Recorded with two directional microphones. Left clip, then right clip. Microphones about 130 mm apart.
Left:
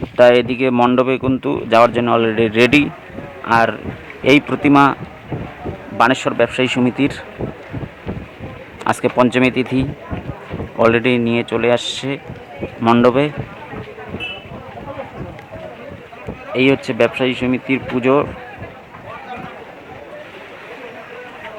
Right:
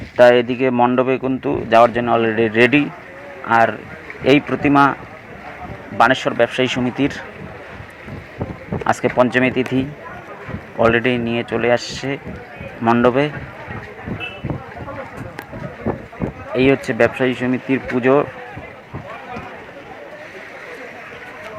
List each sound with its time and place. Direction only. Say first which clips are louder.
0.2 s speech: left 1 dB; 15° left (ahead or behind)
6.0 s speech: even; 15° left (ahead or behind)
8.8 s speech: left 1 dB; 20° left (ahead or behind)
16.6 s speech: even; 10° left (ahead or behind)